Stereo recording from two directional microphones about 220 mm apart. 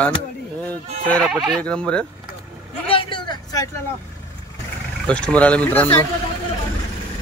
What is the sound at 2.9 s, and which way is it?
Vehicle, 25° left (ahead or behind).